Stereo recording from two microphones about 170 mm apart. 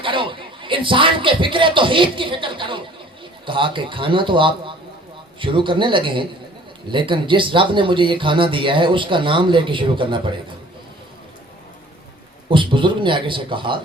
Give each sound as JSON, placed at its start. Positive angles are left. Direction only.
{"t": 0.0, "sound": "speech", "side_deg": -30}
{"t": 12.5, "sound": "speech", "side_deg": -30}